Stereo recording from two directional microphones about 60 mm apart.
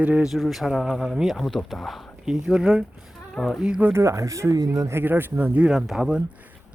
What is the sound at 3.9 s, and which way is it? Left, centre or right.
Speech, right.